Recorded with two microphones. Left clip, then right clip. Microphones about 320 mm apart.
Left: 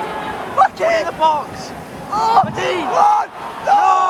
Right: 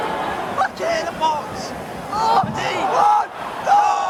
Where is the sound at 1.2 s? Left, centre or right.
Centre.